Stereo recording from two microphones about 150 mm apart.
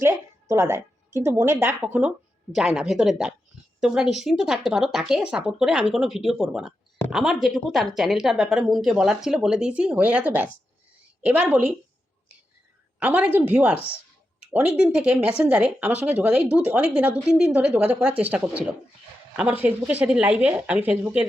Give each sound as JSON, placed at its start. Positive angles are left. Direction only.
{"t": 0.0, "sound": "a woman's voice", "side_deg": -20}
{"t": 13.0, "sound": "a woman's voice", "side_deg": -10}